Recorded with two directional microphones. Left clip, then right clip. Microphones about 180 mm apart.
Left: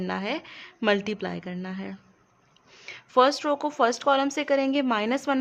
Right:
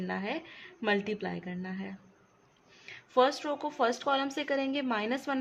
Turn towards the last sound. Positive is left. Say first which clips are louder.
# left 7 dB
turn(degrees=25)  # may be behind; listen again after turning